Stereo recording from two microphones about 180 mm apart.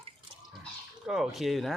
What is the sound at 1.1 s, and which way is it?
Speech, centre (ahead or behind).